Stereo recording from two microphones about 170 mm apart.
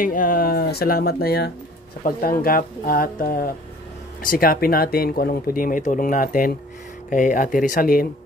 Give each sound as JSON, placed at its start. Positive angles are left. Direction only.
{"t": 0.0, "sound": "speech", "side_deg": 55}
{"t": 2.0, "sound": "speech", "side_deg": 55}